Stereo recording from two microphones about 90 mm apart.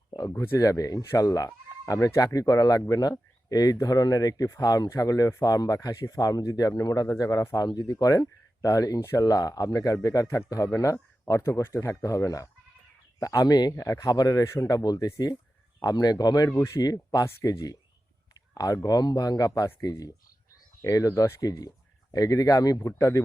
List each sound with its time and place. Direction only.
0.2 s speech: 35° left (ahead or behind)
14.4 s speech: 30° left (ahead or behind)
15.8 s speech: 45° left (ahead or behind)
16.5 s speech: 30° left (ahead or behind)
16.8 s speech: 45° left (ahead or behind)